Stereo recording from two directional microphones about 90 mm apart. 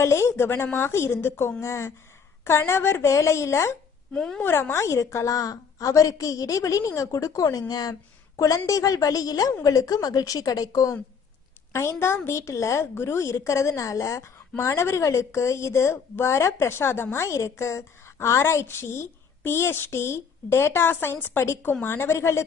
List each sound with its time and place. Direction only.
0.0 s a woman's voice: 30° left (ahead or behind)
4.1 s a woman's voice: 5° left (ahead or behind)
4.4 s a woman's voice: 25° left (ahead or behind); by 10.9 s 40° left (ahead or behind)
11.7 s a woman's voice: 30° left (ahead or behind)